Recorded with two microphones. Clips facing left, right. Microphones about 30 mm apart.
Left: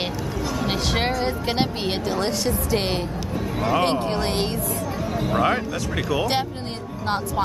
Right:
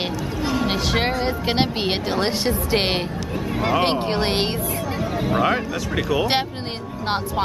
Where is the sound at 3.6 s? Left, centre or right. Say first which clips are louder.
Right 1 dB; right.